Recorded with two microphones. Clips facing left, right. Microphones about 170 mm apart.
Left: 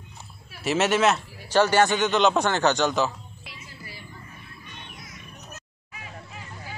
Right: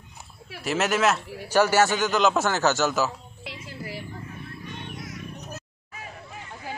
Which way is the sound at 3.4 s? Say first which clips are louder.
Right 10 dB; 90° right.